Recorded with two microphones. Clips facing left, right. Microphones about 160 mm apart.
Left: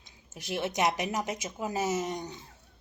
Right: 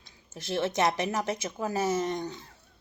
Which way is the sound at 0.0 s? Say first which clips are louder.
Right 3 dB; 15° left (ahead or behind).